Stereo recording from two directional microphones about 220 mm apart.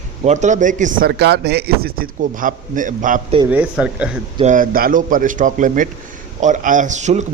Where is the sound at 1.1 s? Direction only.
50° right (ahead or behind).